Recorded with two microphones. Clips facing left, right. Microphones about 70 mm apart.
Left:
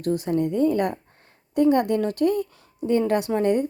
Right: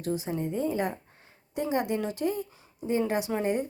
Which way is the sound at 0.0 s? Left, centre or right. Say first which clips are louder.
Left 7 dB; left.